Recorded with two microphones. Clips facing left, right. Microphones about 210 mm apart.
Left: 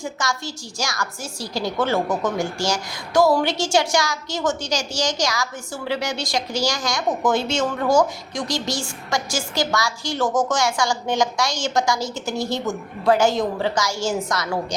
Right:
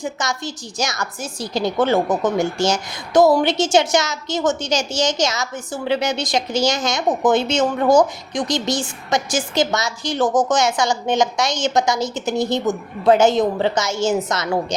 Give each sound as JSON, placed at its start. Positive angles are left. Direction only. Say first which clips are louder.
{"t": 0.0, "sound": "a woman's voice", "louder": "right 2 dB", "side_deg": -20}